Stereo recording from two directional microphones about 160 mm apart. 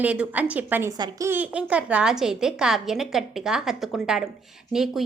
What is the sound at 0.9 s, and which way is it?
Speech, 25° right (ahead or behind).